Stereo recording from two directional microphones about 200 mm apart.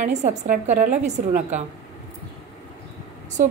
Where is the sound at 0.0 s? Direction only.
35° right (ahead or behind).